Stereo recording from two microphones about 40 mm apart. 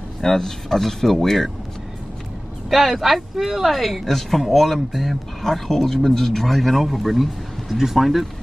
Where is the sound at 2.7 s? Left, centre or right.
Centre.